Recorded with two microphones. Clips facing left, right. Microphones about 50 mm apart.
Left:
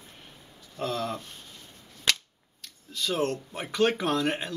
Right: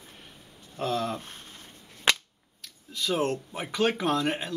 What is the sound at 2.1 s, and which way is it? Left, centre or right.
Cap gun, centre.